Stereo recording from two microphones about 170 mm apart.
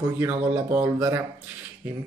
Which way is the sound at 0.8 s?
20° right (ahead or behind).